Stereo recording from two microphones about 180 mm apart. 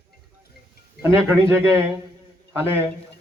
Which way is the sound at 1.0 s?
10° right (ahead or behind).